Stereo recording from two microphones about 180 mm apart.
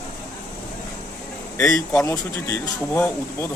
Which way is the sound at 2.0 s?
15° left (ahead or behind).